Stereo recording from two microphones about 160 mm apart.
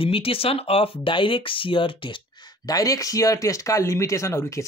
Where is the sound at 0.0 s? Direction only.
35° left (ahead or behind).